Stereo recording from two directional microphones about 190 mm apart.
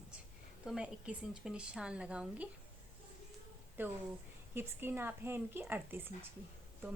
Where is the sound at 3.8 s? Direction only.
10° right (ahead or behind).